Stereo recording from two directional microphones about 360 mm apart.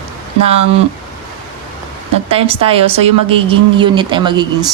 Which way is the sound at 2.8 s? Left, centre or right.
Centre.